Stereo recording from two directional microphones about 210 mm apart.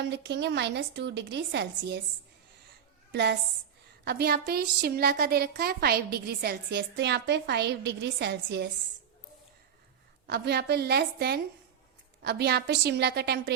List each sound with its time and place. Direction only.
0.0 s a woman's voice: 55° right (ahead or behind)
3.1 s a woman's voice: 55° right (ahead or behind)
10.2 s a woman's voice: 50° right (ahead or behind)